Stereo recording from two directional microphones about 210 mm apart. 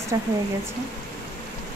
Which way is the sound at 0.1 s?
15° right (ahead or behind).